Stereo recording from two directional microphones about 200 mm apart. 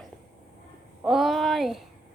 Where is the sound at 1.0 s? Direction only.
Centre (ahead or behind).